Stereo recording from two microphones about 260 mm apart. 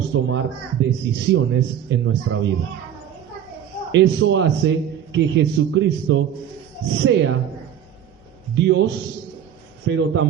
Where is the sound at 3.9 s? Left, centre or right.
Right.